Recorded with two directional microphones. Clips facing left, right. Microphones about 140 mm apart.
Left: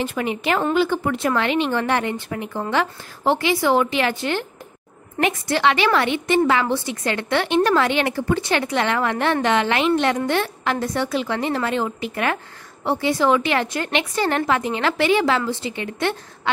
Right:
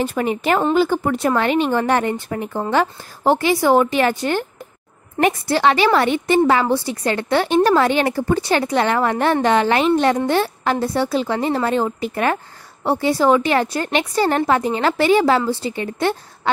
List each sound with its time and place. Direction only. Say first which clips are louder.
0.0 s a woman's voice: right 3 dB; 40° right (ahead or behind)